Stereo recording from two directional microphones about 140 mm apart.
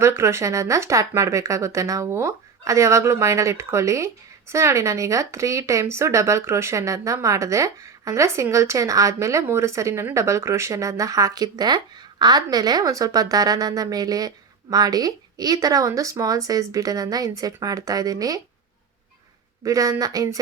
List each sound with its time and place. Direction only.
0.0 s speech: 20° right (ahead or behind)
19.6 s speech: 25° right (ahead or behind)